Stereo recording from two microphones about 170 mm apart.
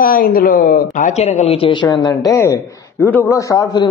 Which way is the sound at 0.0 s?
55° left (ahead or behind).